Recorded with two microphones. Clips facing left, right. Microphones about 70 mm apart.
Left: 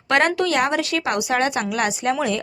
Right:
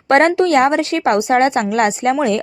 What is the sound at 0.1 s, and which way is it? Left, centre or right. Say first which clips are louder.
A woman's voice: right 7 dB; right.